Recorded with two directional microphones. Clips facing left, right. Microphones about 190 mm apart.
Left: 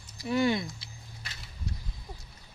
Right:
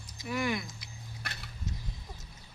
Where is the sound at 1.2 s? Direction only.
60° right (ahead or behind).